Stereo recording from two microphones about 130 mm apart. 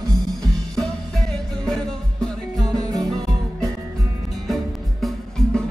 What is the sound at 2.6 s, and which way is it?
Music, 30° right (ahead or behind).